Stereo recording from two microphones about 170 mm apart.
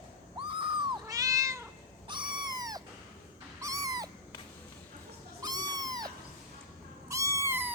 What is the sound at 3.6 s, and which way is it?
Owl, 20° right (ahead or behind).